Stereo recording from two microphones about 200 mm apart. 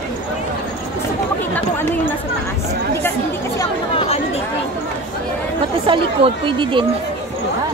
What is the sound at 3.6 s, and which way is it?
Chatter, 30° left (ahead or behind).